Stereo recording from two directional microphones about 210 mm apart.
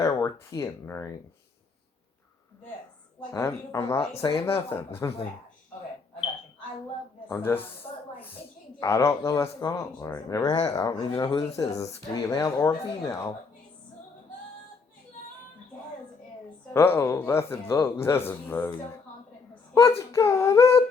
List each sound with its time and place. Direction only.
0.0 s speech: 15° left (ahead or behind)
3.3 s speech: 15° left (ahead or behind)
4.1 s speech: 25° left (ahead or behind)
7.3 s speech: 10° left (ahead or behind)
8.8 s speech: 15° left (ahead or behind)
16.7 s speech: 10° left (ahead or behind)
20.0 s speech: 15° left (ahead or behind)